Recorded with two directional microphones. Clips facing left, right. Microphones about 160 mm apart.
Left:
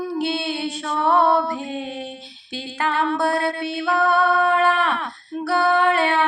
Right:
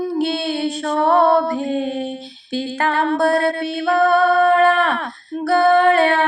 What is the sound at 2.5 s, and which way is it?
Music, 45° right (ahead or behind).